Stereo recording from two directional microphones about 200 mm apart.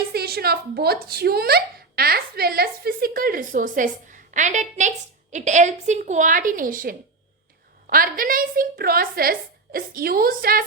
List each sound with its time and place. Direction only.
0.1 s speech: 50° right (ahead or behind)